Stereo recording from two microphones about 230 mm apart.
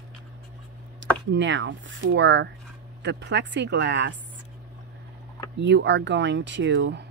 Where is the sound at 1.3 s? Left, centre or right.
Right.